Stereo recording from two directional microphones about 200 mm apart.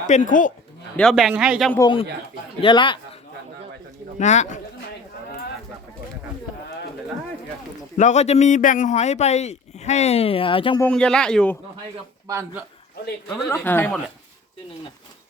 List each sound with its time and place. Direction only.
0.0 s a man's voice: 40° left (ahead or behind)
0.9 s speech: centre (ahead or behind)
2.6 s a man's voice: 25° left (ahead or behind)
4.2 s a man's voice: 35° left (ahead or behind)
7.9 s a man's voice: 35° left (ahead or behind)
10.8 s speech: 5° left (ahead or behind)
13.5 s speech: 10° left (ahead or behind)